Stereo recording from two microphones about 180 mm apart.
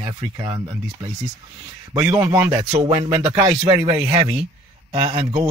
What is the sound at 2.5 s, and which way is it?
Speech, 35° right (ahead or behind).